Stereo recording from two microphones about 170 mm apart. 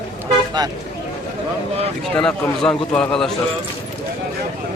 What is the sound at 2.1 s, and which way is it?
A man's voice, 5° left (ahead or behind).